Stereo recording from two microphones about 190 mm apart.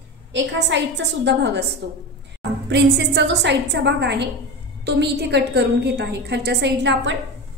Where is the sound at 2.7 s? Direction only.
65° right (ahead or behind).